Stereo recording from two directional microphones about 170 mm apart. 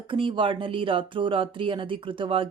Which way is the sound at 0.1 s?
30° right (ahead or behind).